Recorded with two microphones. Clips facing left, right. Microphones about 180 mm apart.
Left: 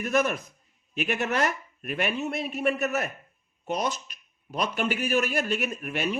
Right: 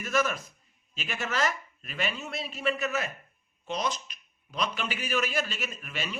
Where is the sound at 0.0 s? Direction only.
60° left (ahead or behind).